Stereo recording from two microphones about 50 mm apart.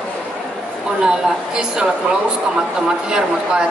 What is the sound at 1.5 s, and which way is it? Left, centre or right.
Speech, centre.